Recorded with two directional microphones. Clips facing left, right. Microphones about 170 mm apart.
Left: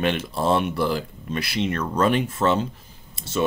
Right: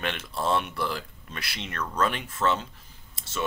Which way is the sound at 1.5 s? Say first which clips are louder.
Left 15 dB; 15° left (ahead or behind).